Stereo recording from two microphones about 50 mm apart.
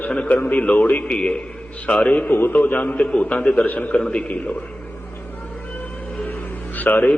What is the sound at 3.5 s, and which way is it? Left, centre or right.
Speech, left.